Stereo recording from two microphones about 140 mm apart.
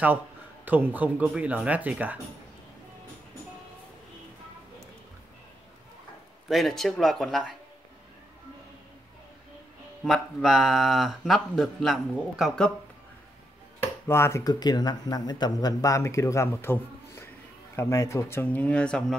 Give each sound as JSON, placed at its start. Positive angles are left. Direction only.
{"t": 0.7, "sound": "speech", "side_deg": -15}
{"t": 6.5, "sound": "speech", "side_deg": 0}
{"t": 10.0, "sound": "speech", "side_deg": 0}
{"t": 14.0, "sound": "speech", "side_deg": 20}